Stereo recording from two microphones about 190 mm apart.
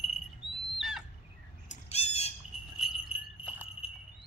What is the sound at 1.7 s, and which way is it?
Squawk, 35° left (ahead or behind).